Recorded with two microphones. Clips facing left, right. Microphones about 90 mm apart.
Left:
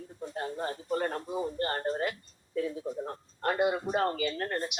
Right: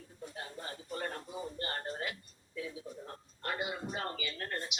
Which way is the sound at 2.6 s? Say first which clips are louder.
Left 10 dB; 55° left (ahead or behind).